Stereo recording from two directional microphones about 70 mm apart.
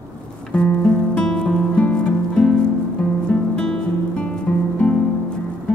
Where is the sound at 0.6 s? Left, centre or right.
Centre.